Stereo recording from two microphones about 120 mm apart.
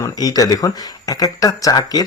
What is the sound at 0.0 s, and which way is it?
Speech, 30° left (ahead or behind).